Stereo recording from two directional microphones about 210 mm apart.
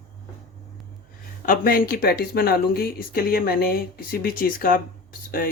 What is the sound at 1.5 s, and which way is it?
Speech, 45° left (ahead or behind).